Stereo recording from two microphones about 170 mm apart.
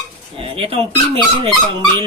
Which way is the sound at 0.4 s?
35° right (ahead or behind).